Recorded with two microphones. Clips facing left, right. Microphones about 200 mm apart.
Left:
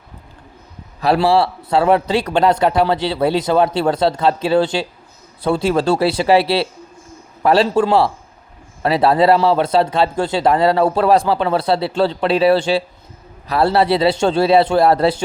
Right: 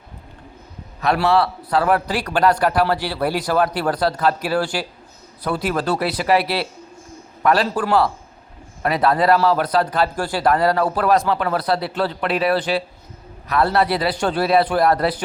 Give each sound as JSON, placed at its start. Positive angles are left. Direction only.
{"t": 1.0, "sound": "speech", "side_deg": 30}